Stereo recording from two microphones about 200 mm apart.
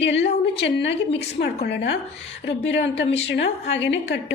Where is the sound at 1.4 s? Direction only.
55° left (ahead or behind).